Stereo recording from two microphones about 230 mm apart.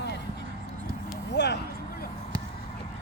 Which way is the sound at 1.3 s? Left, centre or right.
Left.